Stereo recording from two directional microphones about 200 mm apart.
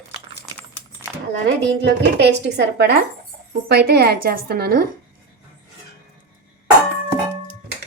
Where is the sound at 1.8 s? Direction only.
55° right (ahead or behind).